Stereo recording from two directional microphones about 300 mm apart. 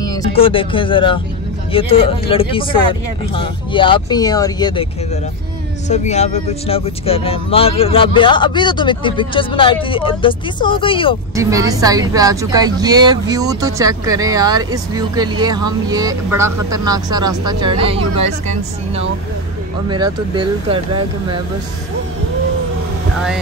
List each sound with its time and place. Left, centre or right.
0.0 s speech: centre
11.3 s a woman's voice: centre
19.9 s a woman's voice: centre